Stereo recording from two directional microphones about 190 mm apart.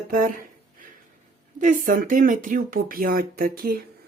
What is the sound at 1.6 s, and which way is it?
Speech, 45° right (ahead or behind).